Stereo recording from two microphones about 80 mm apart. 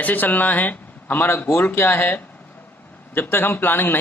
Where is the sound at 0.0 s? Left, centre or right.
Left.